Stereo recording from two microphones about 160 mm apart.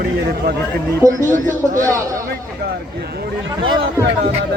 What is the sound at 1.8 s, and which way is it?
Speech, 20° right (ahead or behind).